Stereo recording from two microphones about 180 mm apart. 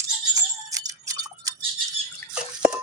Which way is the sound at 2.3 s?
5° right (ahead or behind).